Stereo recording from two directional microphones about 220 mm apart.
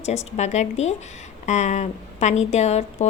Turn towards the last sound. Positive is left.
turn(degrees=30)  # may be behind; listen again after turning